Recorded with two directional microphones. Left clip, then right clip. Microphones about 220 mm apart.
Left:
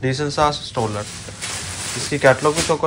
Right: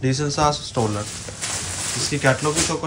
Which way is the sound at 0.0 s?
15° right (ahead or behind).